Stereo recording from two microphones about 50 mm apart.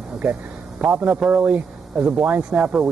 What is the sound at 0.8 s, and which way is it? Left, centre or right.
Speech, centre.